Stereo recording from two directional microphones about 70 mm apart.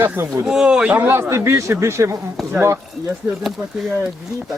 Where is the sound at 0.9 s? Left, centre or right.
Right.